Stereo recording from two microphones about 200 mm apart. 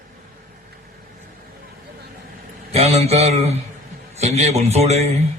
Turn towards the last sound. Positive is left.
turn(degrees=-30)  # may be behind; listen again after turning